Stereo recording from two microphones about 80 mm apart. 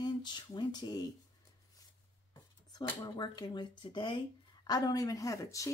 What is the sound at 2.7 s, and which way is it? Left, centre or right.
Speech, left.